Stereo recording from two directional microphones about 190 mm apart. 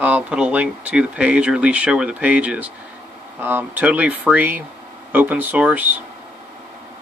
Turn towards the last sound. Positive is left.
turn(degrees=-10)  # may be behind; listen again after turning